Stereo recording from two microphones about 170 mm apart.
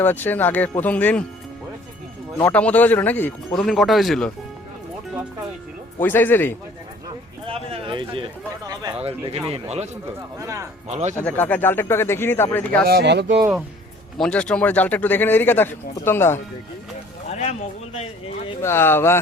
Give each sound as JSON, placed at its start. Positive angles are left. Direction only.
{"t": 0.0, "sound": "speech", "side_deg": 10}
{"t": 2.4, "sound": "speech", "side_deg": 10}
{"t": 6.0, "sound": "speech", "side_deg": 10}
{"t": 7.4, "sound": "a sound", "side_deg": -35}
{"t": 9.0, "sound": "speech", "side_deg": -35}
{"t": 10.4, "sound": "speech", "side_deg": -20}
{"t": 10.8, "sound": "speech", "side_deg": -40}
{"t": 11.2, "sound": "speech", "side_deg": 10}
{"t": 12.8, "sound": "speech", "side_deg": -75}
{"t": 14.2, "sound": "speech", "side_deg": 5}
{"t": 18.6, "sound": "speech", "side_deg": 15}